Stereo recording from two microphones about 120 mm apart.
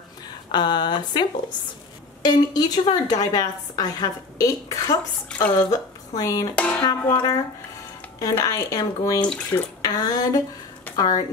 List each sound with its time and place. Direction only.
0.5 s a woman's voice: 35° left (ahead or behind)
2.2 s a woman's voice: 35° left (ahead or behind)
6.5 s speech: 10° left (ahead or behind)
6.8 s a woman's voice: 35° left (ahead or behind)